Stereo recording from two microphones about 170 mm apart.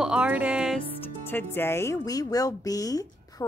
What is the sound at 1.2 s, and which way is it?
Speech, 15° left (ahead or behind).